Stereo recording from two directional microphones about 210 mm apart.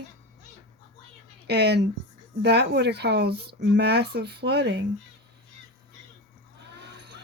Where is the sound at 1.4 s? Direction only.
50° right (ahead or behind).